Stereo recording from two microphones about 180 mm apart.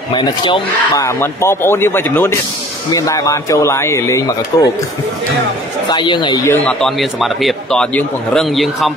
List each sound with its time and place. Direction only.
0.1 s speech: 25° left (ahead or behind)
5.9 s a man's voice: 25° left (ahead or behind); by 8.9 s centre (ahead or behind)